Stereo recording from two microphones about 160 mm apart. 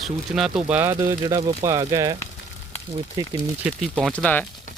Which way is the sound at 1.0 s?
25° right (ahead or behind).